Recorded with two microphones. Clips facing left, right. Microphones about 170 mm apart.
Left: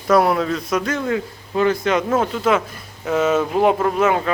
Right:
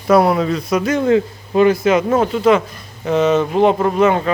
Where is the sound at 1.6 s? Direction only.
5° right (ahead or behind).